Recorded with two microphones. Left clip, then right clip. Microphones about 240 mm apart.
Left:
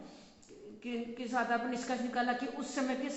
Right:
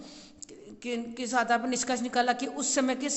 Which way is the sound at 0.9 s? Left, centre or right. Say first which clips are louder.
Right 6 dB; right.